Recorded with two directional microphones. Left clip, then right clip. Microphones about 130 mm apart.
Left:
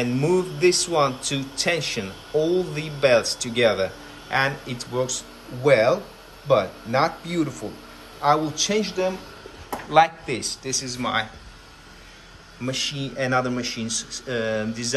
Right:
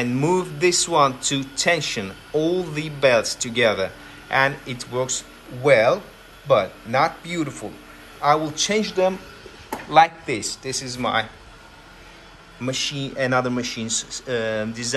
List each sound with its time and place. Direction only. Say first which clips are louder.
0.3 s speech: left 1 dB; 15° left (ahead or behind)
8.8 s speech: right 4 dB; 5° left (ahead or behind)
9.8 s speech: right 2 dB; 20° left (ahead or behind)
12.6 s speech: right 1 dB; 15° left (ahead or behind)